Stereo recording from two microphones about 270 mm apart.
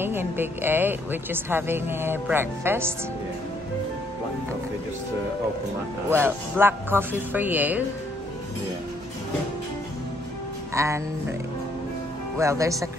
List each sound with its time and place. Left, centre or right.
0.0 s a woman's voice: centre
6.0 s a woman's voice: centre
10.7 s a woman's voice: centre
12.4 s a woman's voice: centre